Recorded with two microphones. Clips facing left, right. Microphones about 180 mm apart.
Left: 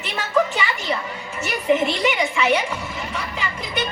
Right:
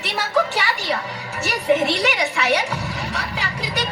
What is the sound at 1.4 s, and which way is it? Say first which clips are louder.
Speech: right 1 dB; 75° right (ahead or behind).